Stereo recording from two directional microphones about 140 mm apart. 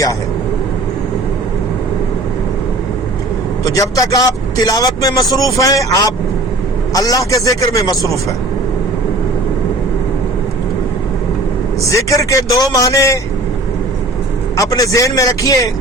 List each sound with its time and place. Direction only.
3.6 s a man's voice: 25° left (ahead or behind)
11.9 s a man's voice: 20° left (ahead or behind)
14.6 s a man's voice: 25° left (ahead or behind)